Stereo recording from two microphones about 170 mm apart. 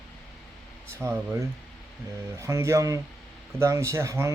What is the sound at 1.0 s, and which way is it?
Speech, 15° right (ahead or behind).